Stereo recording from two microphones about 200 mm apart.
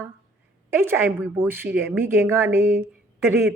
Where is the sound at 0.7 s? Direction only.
10° right (ahead or behind).